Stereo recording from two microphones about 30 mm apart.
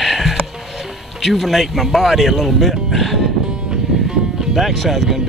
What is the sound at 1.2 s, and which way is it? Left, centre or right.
Speech, centre.